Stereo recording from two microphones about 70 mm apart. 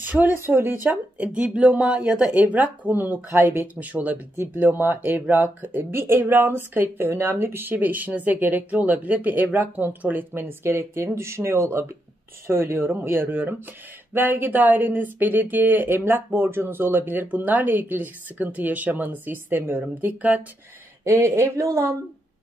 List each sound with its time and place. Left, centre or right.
0.0 s speech: right
0.8 s speech: centre
21.2 s speech: right